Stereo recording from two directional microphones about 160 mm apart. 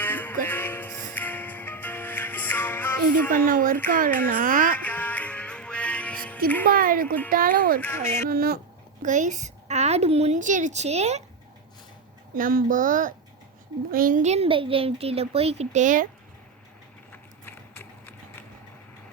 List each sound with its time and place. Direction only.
0.0 s music: 10° left (ahead or behind)
3.3 s speech: 60° right (ahead or behind)
4.8 s music: 10° left (ahead or behind)
6.7 s speech: 65° right (ahead or behind)
7.8 s speech: 15° left (ahead or behind)
8.3 s speech: 70° right (ahead or behind)
9.0 s a woman's voice: 50° right (ahead or behind)
12.4 s a child's voice: 60° right (ahead or behind)
17.1 s a sound: 15° left (ahead or behind)